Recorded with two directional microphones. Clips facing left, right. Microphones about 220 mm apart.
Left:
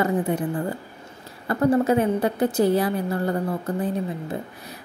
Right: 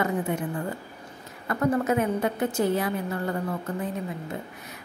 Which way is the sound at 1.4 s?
30° left (ahead or behind).